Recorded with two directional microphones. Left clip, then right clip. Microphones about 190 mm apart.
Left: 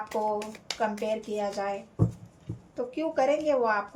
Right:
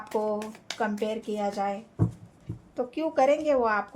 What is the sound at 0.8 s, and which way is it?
A woman's voice, 40° right (ahead or behind).